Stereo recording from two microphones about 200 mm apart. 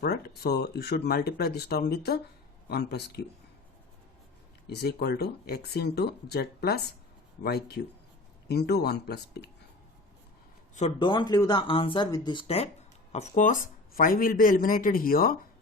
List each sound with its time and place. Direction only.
0.0 s speech: 55° left (ahead or behind)
4.6 s speech: 55° left (ahead or behind)
10.8 s speech: 30° left (ahead or behind)
13.1 s speech: 40° left (ahead or behind)